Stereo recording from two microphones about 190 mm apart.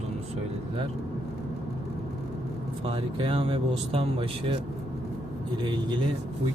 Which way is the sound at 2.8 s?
30° right (ahead or behind).